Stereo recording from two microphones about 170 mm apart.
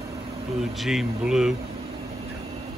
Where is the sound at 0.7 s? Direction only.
Centre (ahead or behind).